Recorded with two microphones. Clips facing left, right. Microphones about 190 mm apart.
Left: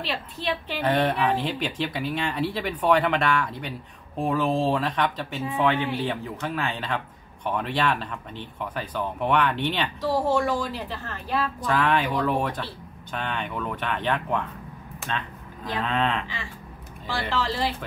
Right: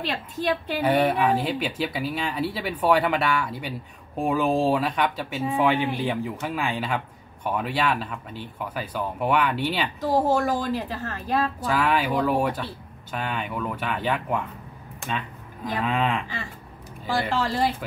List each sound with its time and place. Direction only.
0.0 s a woman's voice: 45° right (ahead or behind)
0.7 s speech: 10° right (ahead or behind)
10.2 s a woman's voice: 40° right (ahead or behind)
11.6 s speech: 5° right (ahead or behind)
15.7 s speech: 10° right (ahead or behind)
17.1 s a woman's voice: 45° right (ahead or behind)